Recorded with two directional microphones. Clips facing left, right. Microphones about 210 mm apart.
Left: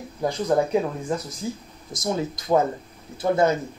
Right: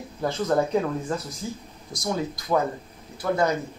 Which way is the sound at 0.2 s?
15° left (ahead or behind).